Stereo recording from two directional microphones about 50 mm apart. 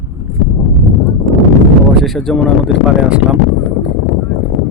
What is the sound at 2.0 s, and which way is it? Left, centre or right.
Speech, centre.